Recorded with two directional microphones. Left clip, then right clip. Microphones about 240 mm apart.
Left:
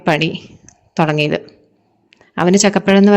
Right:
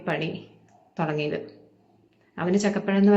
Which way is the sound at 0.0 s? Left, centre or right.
Left.